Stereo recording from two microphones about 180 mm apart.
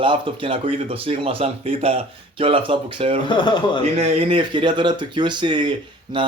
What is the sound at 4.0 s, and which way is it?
A man's voice, 30° right (ahead or behind).